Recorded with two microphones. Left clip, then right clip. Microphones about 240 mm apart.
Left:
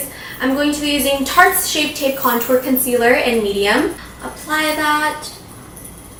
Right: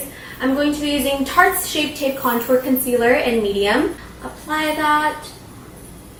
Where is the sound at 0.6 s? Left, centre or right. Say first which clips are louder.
Left 3 dB; centre.